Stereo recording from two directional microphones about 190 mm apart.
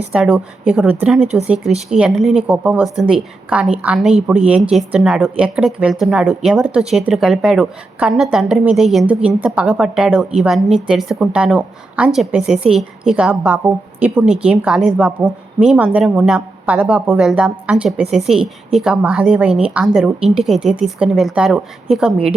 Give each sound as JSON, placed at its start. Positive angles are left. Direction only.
{"t": 0.1, "sound": "a woman's voice", "side_deg": -5}